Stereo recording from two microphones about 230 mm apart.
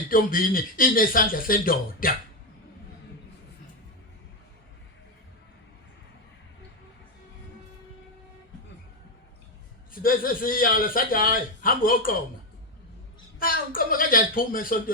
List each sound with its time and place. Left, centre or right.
0.1 s a man's voice: left
9.9 s a man's voice: left
13.4 s a man's voice: left